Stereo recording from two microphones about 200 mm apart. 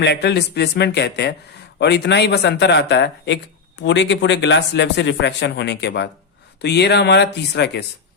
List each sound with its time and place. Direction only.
0.0 s speech: 55° left (ahead or behind)